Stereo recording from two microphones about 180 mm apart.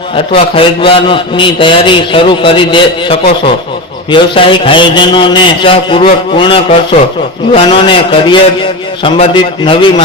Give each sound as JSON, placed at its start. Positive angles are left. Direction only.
{"t": 0.3, "sound": "a man's voice", "side_deg": 30}